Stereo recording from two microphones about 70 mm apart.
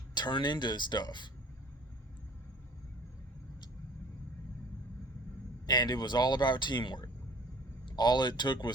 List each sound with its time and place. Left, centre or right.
0.1 s speech: left
5.6 s speech: left